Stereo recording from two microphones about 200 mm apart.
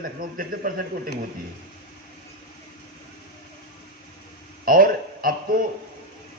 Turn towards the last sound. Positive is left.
turn(degrees=-45)  # may be behind; listen again after turning